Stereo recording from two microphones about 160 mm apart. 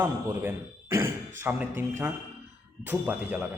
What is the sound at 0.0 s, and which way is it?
A man's voice, 15° right (ahead or behind).